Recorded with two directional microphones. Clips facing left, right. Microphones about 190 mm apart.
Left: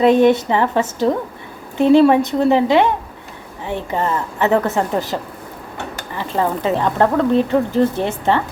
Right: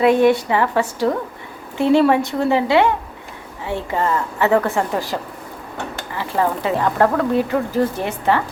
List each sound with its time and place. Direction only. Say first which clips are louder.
0.0 s a woman's voice: left 2 dB; 20° left (ahead or behind)